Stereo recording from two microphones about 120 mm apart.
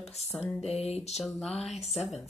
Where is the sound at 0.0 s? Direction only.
60° left (ahead or behind).